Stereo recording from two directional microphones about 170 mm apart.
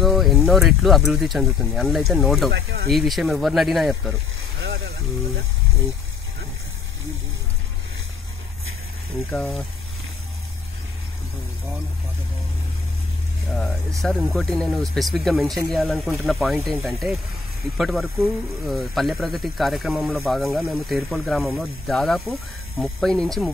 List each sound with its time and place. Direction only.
0.0 s a sound: centre (ahead or behind)
0.5 s speech: centre (ahead or behind)
2.5 s speech: 70° right (ahead or behind)
2.9 s speech: centre (ahead or behind)
4.6 s vehicle: 90° right
9.3 s speech: 5° left (ahead or behind)
14.0 s speech: centre (ahead or behind)